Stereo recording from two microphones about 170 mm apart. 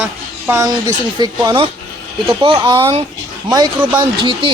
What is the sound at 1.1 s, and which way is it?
Speech, 25° right (ahead or behind).